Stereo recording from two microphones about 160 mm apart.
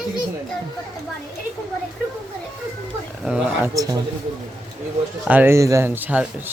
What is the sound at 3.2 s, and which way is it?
Speech, 10° right (ahead or behind).